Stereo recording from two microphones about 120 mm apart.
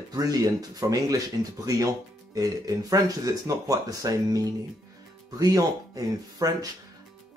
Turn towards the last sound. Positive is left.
turn(degrees=-30)  # may be behind; listen again after turning